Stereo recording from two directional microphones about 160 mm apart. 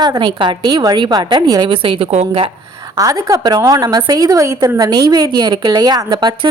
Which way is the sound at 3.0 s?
20° right (ahead or behind).